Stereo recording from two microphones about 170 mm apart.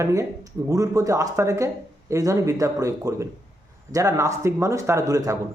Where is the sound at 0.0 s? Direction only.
15° right (ahead or behind).